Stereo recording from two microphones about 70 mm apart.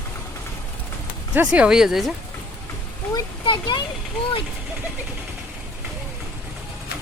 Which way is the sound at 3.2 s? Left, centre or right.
Left.